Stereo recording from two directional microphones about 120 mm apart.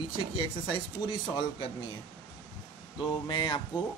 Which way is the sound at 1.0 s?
40° left (ahead or behind).